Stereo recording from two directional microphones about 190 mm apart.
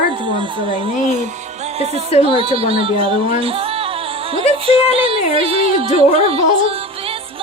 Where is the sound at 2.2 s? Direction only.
30° right (ahead or behind).